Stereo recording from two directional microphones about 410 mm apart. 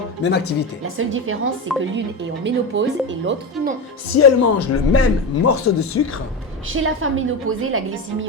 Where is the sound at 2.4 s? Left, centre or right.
Right.